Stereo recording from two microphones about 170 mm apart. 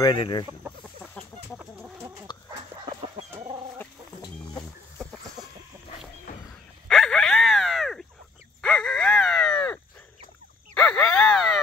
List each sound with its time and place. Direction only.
0.0 s speech: 25° left (ahead or behind)
1.6 s chicken: 5° right (ahead or behind)
6.9 s a sound: 5° left (ahead or behind)
10.7 s groan: 5° left (ahead or behind)